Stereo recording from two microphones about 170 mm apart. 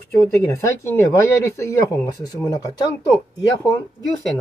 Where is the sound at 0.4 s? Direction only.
15° left (ahead or behind).